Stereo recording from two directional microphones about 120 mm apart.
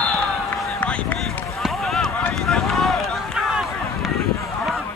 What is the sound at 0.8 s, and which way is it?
Run, 10° left (ahead or behind).